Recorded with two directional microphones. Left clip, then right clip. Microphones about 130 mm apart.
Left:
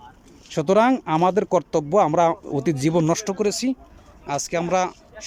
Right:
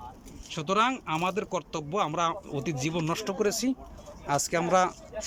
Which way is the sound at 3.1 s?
45° left (ahead or behind).